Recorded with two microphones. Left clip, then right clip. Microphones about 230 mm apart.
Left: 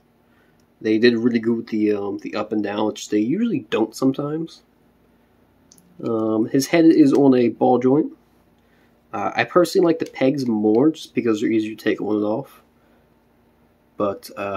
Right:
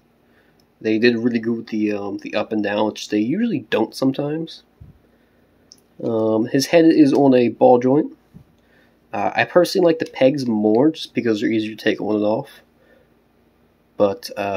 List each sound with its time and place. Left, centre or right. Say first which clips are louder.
0.8 s speech: even; centre
6.0 s speech: right 2 dB; centre
9.1 s speech: right 2 dB; centre
13.9 s speech: right 5 dB; centre